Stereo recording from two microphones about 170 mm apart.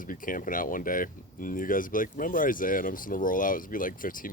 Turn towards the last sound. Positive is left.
turn(degrees=55)  # may be behind; listen again after turning